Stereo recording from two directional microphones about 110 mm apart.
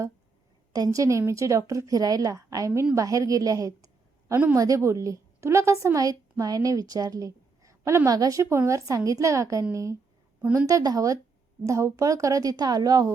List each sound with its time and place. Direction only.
0.7 s a woman's voice: 30° right (ahead or behind)